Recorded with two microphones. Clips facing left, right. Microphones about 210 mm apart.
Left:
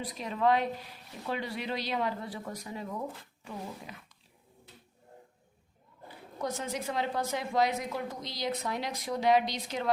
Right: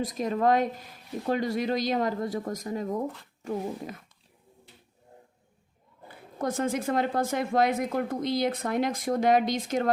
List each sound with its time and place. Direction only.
0.0 s speech: 45° right (ahead or behind)
6.4 s speech: 50° right (ahead or behind)